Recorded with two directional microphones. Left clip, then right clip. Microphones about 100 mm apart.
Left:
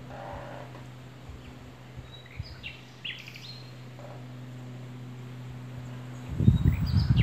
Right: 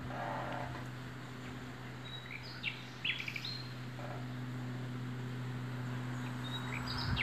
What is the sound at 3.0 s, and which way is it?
Bird, 25° left (ahead or behind).